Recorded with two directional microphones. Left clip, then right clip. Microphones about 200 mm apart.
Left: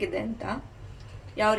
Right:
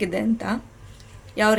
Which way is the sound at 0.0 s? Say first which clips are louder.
Right 6 dB; 45° right (ahead or behind).